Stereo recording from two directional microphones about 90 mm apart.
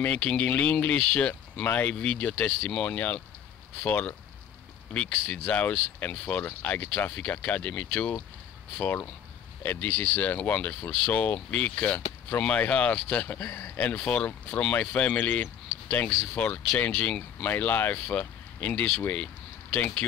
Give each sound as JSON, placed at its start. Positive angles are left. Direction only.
{"t": 0.0, "sound": "speech", "side_deg": 15}
{"t": 5.1, "sound": "speech", "side_deg": 10}